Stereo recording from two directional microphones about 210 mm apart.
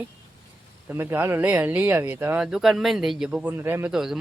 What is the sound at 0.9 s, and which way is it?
Speech, 10° right (ahead or behind).